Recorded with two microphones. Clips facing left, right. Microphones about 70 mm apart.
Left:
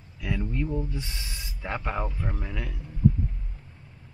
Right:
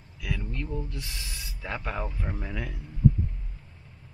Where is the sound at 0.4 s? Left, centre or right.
Centre.